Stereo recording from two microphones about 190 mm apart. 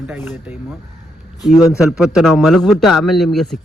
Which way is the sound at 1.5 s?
15° left (ahead or behind).